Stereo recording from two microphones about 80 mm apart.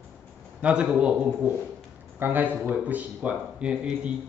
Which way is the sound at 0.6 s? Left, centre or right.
Centre.